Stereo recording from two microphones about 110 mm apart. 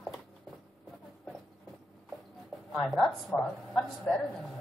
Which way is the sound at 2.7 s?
Centre (ahead or behind).